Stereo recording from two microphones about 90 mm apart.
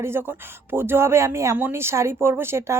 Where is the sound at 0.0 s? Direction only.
25° right (ahead or behind).